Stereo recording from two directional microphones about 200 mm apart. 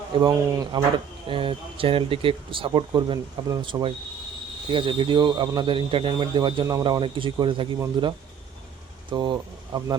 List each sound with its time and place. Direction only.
0.1 s speech: 15° right (ahead or behind)